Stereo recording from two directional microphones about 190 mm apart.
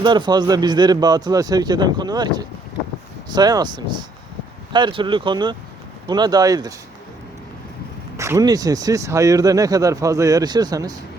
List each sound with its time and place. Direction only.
0.0 s speech: 25° right (ahead or behind)
8.1 s speech: 15° right (ahead or behind)